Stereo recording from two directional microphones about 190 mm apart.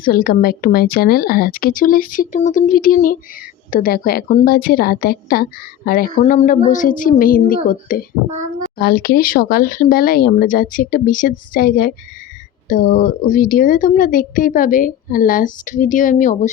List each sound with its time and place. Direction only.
0.0 s a woman's voice: 50° left (ahead or behind)